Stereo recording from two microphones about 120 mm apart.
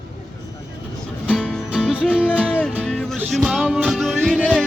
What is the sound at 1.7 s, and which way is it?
Music, 10° right (ahead or behind).